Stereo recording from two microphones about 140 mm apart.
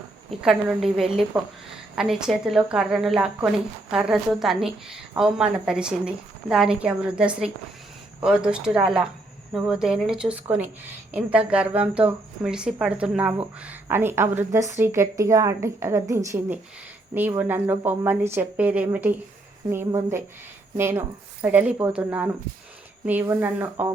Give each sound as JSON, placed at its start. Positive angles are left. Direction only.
{"t": 0.4, "sound": "a woman's voice", "side_deg": -5}